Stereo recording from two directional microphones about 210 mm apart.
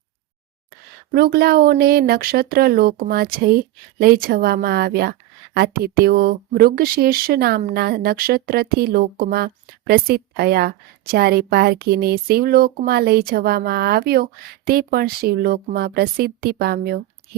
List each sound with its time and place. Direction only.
1.1 s speech: 45° right (ahead or behind)